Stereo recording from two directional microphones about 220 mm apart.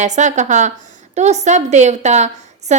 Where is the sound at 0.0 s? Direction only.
35° right (ahead or behind).